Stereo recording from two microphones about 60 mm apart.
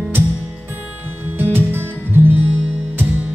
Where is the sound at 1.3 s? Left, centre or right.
Right.